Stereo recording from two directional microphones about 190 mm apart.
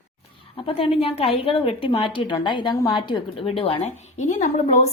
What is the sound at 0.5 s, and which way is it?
A woman's voice, 30° left (ahead or behind).